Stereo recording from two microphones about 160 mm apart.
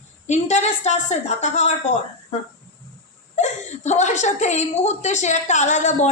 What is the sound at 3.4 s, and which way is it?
A woman's voice, 45° left (ahead or behind).